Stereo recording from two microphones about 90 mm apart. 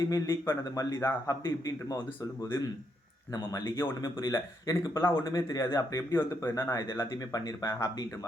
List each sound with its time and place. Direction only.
0.0 s speech: 40° left (ahead or behind)
0.8 s a man's voice: 30° left (ahead or behind)
1.5 s speech: 40° left (ahead or behind)
3.3 s speech: 35° left (ahead or behind)
4.2 s speech: 40° left (ahead or behind)
4.9 s a man's voice: 30° left (ahead or behind)
5.3 s speech: 40° left (ahead or behind)
6.1 s a man's voice: 25° left (ahead or behind)
6.9 s speech: 40° left (ahead or behind)